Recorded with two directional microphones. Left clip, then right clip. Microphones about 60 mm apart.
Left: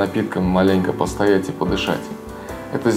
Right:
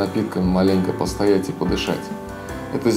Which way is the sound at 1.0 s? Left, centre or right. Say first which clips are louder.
Left 1 dB; right.